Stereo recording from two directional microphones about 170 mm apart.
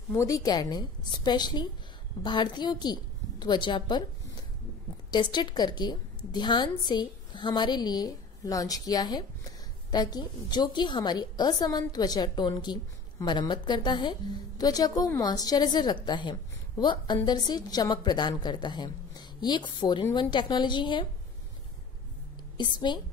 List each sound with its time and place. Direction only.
0.1 s a woman's voice: 15° left (ahead or behind)
5.1 s a woman's voice: 25° left (ahead or behind)
22.6 s a woman's voice: 30° left (ahead or behind)